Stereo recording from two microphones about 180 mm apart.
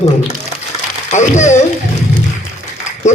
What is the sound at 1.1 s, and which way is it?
Speech, 40° left (ahead or behind).